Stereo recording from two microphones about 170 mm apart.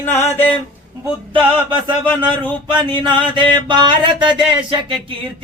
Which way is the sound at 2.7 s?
30° right (ahead or behind).